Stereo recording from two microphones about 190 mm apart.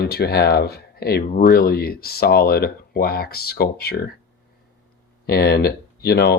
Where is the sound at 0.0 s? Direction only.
55° left (ahead or behind).